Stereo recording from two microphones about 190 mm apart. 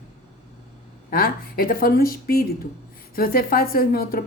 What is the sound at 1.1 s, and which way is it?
A woman's voice, 50° left (ahead or behind).